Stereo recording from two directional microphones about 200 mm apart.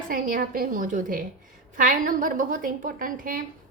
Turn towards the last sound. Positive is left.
turn(degrees=-45)  # may be behind; listen again after turning